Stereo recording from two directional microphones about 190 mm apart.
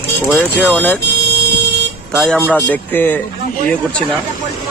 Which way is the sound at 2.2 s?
5° left (ahead or behind).